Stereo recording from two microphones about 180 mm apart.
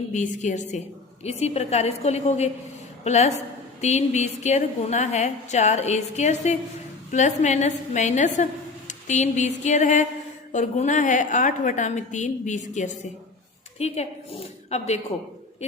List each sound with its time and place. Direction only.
0.1 s a woman's voice: 40° left (ahead or behind)